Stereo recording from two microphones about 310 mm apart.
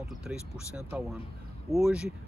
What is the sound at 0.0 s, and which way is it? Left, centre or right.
Speech, centre.